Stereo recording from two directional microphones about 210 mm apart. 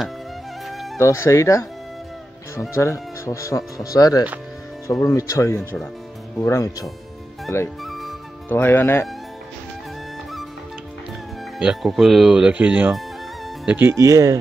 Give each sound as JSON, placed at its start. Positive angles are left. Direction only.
{"t": 0.9, "sound": "speech", "side_deg": 15}
{"t": 2.7, "sound": "speech", "side_deg": 15}
{"t": 7.8, "sound": "music", "side_deg": 0}
{"t": 11.6, "sound": "speech", "side_deg": 0}